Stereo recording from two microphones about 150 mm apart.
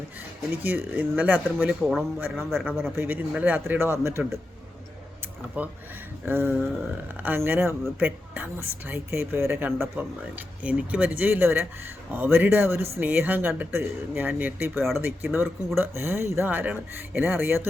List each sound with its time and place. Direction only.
0.5 s speech: 15° right (ahead or behind)
2.9 s speech: 15° right (ahead or behind)
5.6 s speech: 10° right (ahead or behind)
9.7 s speech: centre (ahead or behind)